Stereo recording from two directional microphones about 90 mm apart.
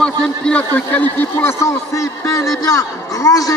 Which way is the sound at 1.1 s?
25° left (ahead or behind).